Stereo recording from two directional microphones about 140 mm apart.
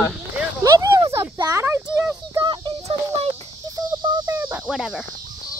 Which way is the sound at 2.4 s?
35° right (ahead or behind).